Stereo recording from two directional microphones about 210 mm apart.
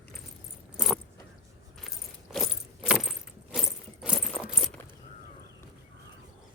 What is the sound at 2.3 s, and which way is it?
Keys jangling, centre (ahead or behind).